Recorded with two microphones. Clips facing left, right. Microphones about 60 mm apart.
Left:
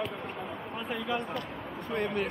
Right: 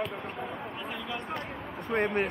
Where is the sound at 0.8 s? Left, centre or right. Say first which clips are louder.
Left 7 dB; centre.